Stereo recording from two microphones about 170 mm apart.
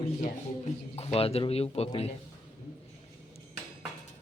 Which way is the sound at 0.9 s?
35° left (ahead or behind).